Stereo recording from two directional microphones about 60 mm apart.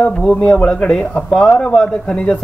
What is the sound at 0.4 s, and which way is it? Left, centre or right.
Speech, centre.